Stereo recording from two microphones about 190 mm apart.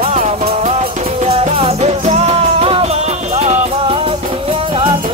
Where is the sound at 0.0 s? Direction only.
35° right (ahead or behind).